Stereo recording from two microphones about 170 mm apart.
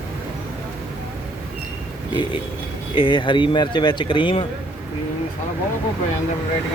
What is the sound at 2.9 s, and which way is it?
Speech, 30° left (ahead or behind).